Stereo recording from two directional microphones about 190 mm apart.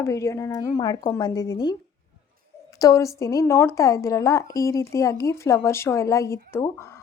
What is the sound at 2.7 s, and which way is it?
A woman's voice, 15° left (ahead or behind).